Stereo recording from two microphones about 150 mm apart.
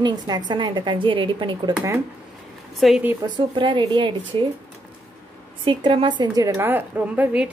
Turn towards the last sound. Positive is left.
turn(degrees=-10)  # may be behind; listen again after turning